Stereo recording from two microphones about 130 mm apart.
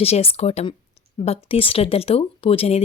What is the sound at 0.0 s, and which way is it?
Speech, 50° left (ahead or behind).